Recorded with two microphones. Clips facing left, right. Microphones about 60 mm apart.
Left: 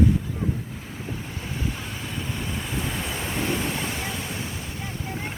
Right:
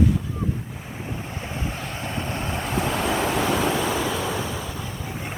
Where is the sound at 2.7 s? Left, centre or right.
Right.